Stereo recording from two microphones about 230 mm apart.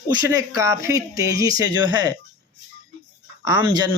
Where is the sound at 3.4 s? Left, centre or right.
Centre.